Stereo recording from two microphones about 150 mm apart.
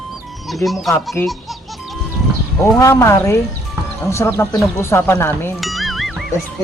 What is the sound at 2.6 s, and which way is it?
Speech, 20° left (ahead or behind).